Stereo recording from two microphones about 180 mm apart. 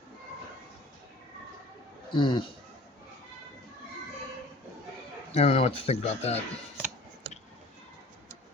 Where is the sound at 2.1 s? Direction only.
25° left (ahead or behind).